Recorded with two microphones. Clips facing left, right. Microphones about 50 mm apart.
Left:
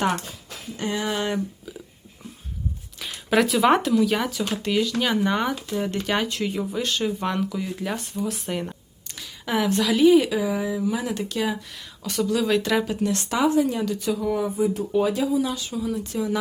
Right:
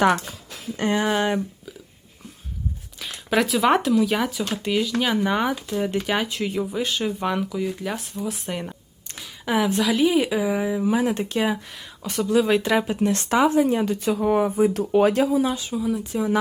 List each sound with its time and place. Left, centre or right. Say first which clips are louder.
0.8 s speech: right 5 dB; right
3.0 s speech: left 1 dB; centre; by 14.7 s right
14.7 s speech: right 4 dB; right
15.4 s speech: right 3 dB; right
15.7 s speech: right 2 dB; centre